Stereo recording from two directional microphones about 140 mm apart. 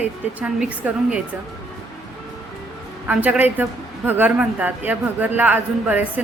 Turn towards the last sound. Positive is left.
turn(degrees=-10)  # may be behind; listen again after turning